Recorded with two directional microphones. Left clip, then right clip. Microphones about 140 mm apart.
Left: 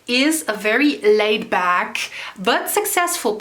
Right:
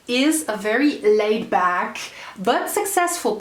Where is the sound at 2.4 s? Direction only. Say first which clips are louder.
Left 2 dB; 40° left (ahead or behind).